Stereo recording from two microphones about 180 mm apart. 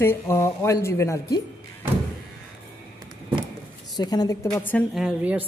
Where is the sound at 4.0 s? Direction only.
20° left (ahead or behind).